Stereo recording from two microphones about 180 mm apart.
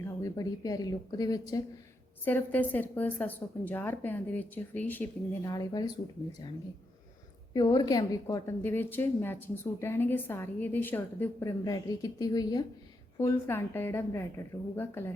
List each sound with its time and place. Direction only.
0.0 s speech: 20° left (ahead or behind)
2.2 s a woman's voice: 10° left (ahead or behind)
5.5 s a woman's voice: 20° left (ahead or behind)